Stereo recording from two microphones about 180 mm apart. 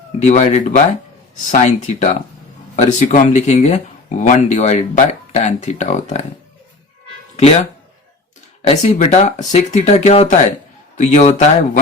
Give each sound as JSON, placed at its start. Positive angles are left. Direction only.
{"t": 0.2, "sound": "speech", "side_deg": 40}
{"t": 8.6, "sound": "speech", "side_deg": 40}